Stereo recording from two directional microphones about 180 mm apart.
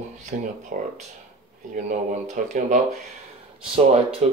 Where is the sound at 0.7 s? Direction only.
45° right (ahead or behind).